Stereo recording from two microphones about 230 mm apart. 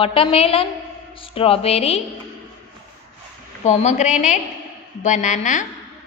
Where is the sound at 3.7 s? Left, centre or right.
Left.